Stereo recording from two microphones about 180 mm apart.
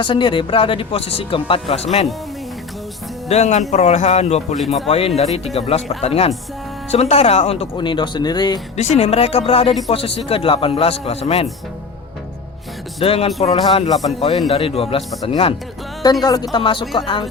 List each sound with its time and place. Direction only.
0.0 s speech: 25° left (ahead or behind)
3.2 s speech: 40° left (ahead or behind); by 8.6 s 25° left (ahead or behind)
8.7 s speech: 40° left (ahead or behind)
13.0 s speech: 35° left (ahead or behind)